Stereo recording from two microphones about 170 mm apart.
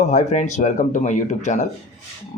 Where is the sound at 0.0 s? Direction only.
40° left (ahead or behind).